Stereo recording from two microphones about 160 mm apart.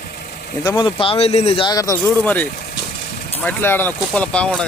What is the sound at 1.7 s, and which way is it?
Speech, 20° left (ahead or behind).